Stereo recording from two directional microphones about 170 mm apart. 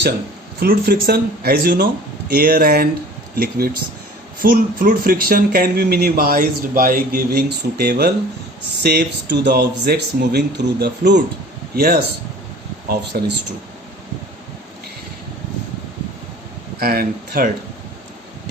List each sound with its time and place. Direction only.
0.6 s speech: 60° right (ahead or behind); by 11.2 s 80° right
11.8 s speech: 60° right (ahead or behind)
16.8 s speech: 60° right (ahead or behind)